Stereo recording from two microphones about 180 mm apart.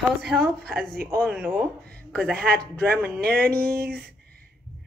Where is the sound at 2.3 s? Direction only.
60° right (ahead or behind).